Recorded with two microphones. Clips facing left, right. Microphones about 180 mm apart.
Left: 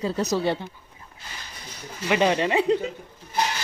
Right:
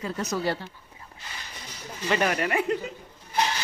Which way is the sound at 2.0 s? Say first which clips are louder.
Left 4 dB; 20° left (ahead or behind).